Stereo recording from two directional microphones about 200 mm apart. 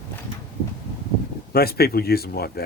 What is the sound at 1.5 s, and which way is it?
Speech, 50° left (ahead or behind).